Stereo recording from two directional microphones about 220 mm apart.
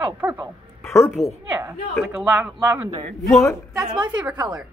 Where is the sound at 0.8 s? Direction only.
10° left (ahead or behind).